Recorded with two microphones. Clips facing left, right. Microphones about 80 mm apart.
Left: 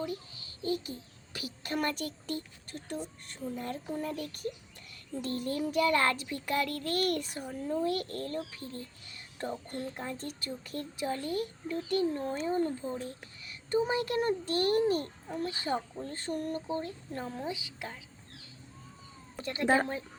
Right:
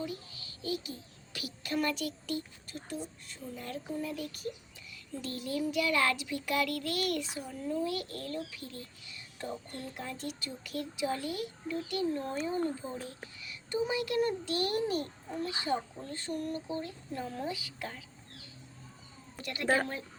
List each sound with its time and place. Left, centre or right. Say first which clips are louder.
0.0 s a child's voice: left 2 dB; left
3.6 s a child's voice: even; left
17.3 s a woman's voice: even; left
19.4 s a woman's voice: left 3 dB; left